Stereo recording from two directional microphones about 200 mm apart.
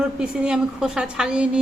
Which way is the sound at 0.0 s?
5° right (ahead or behind).